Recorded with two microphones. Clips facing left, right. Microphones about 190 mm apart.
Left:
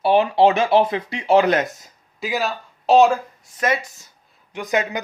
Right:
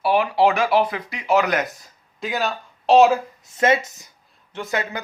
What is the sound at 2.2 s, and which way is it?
Speech, 5° left (ahead or behind).